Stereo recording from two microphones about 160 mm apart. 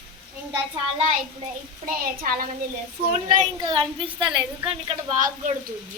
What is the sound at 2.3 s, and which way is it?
A child's voice, 60° right (ahead or behind).